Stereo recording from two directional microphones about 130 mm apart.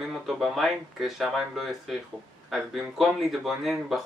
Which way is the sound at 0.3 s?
Centre (ahead or behind).